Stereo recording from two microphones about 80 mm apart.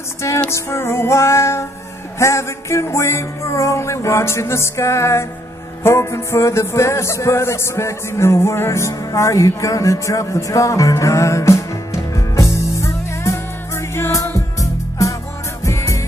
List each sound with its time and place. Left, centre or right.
0.5 s music: left